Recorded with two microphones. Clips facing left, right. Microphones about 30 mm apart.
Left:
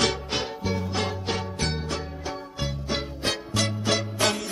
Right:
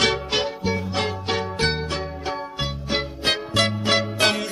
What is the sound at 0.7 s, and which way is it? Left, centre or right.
Music, right.